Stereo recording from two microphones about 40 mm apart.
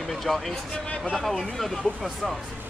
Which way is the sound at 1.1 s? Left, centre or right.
Centre.